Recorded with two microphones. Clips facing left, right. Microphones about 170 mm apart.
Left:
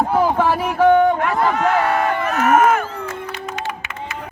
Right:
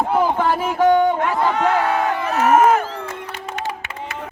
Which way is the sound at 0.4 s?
10° left (ahead or behind).